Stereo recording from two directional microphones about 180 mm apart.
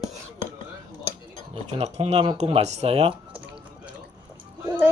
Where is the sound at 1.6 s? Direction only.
35° right (ahead or behind).